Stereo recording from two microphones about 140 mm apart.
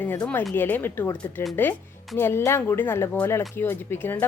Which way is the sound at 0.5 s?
15° left (ahead or behind).